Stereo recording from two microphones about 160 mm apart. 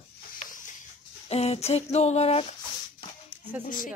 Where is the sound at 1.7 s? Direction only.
40° left (ahead or behind).